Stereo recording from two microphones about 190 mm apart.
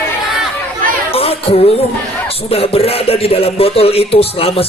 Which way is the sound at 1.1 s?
30° left (ahead or behind).